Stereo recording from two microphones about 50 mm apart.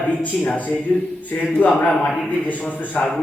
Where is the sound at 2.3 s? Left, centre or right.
Left.